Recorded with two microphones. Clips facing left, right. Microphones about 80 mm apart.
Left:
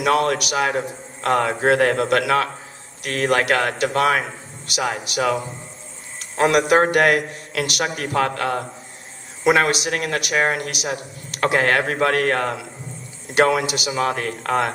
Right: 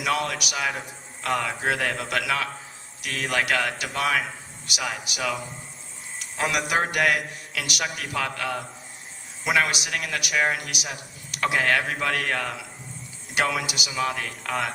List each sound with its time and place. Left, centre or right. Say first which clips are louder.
0.0 s speech: left 8 dB; left